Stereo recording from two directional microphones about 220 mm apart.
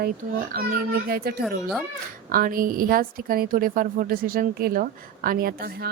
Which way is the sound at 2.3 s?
40° right (ahead or behind).